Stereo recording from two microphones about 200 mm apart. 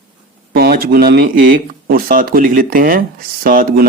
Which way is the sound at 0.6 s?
50° right (ahead or behind).